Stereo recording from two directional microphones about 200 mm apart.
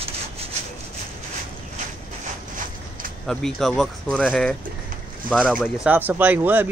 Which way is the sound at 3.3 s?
Centre (ahead or behind).